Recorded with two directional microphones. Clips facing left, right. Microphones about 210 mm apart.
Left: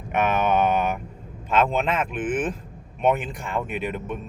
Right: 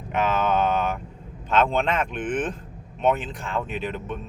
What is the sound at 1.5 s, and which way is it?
Speech, 5° left (ahead or behind).